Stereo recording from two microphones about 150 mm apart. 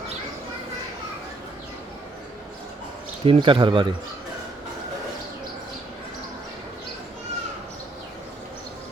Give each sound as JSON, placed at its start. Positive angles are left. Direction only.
{"t": 3.2, "sound": "speech", "side_deg": -35}